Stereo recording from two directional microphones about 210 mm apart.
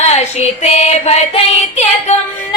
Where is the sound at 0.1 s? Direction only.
30° left (ahead or behind).